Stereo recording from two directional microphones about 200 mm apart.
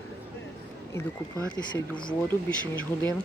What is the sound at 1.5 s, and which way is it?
Speech, 25° left (ahead or behind).